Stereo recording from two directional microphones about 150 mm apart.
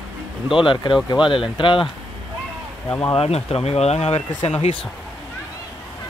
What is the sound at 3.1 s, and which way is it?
Speech, 40° left (ahead or behind).